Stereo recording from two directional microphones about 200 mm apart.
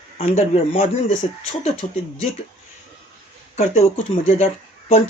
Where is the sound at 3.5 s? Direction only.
35° left (ahead or behind).